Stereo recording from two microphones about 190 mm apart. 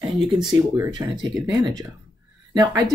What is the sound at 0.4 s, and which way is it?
Speech, 20° right (ahead or behind).